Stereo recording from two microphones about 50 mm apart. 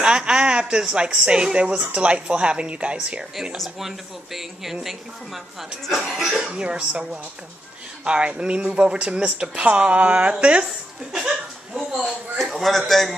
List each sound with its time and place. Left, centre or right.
0.0 s speech: centre
3.5 s speech: centre
6.4 s speech: centre
10.6 s a woman's voice: centre